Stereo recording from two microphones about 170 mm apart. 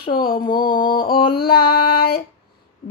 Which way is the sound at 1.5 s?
65° left (ahead or behind).